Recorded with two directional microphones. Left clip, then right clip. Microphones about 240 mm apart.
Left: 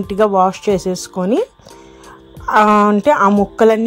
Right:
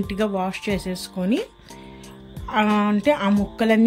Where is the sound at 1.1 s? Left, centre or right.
Left.